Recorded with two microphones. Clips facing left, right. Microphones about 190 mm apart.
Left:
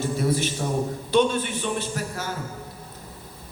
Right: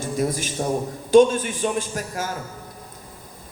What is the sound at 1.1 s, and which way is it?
A man's voice, 45° right (ahead or behind).